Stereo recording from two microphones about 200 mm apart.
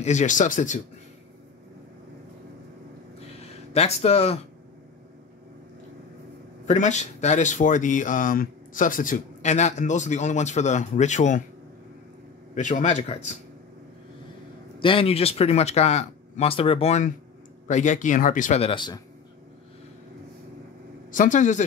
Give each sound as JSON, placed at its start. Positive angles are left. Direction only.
{"t": 0.0, "sound": "speech", "side_deg": 35}
{"t": 3.3, "sound": "speech", "side_deg": 30}
{"t": 6.7, "sound": "speech", "side_deg": 35}
{"t": 12.5, "sound": "speech", "side_deg": 40}
{"t": 14.8, "sound": "speech", "side_deg": 25}
{"t": 21.1, "sound": "speech", "side_deg": 40}